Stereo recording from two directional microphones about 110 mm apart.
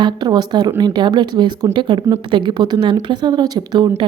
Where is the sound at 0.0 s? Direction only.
40° right (ahead or behind).